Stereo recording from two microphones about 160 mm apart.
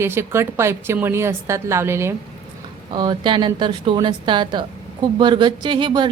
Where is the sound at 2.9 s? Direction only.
25° right (ahead or behind).